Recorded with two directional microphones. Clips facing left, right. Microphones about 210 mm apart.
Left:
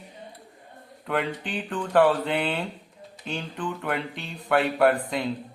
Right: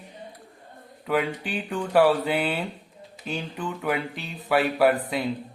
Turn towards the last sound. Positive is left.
turn(degrees=-5)  # may be behind; listen again after turning